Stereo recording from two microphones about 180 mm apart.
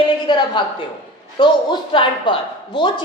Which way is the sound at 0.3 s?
25° left (ahead or behind).